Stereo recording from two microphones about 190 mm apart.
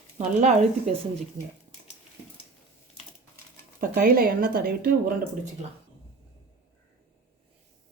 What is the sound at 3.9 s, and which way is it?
Speech, 50° right (ahead or behind).